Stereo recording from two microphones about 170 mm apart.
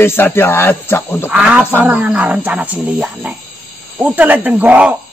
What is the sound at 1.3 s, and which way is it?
A man's voice, 5° right (ahead or behind).